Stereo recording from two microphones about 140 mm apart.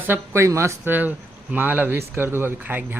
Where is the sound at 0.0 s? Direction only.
15° right (ahead or behind).